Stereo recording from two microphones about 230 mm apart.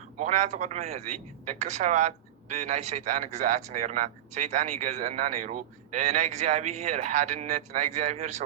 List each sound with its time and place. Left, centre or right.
0.2 s speech: right